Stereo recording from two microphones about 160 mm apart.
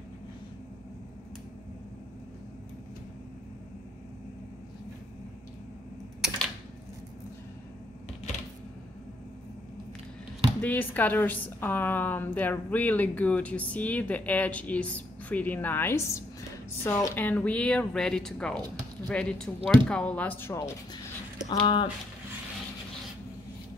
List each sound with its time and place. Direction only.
10.6 s a woman's voice: 10° left (ahead or behind); by 21.8 s 30° left (ahead or behind)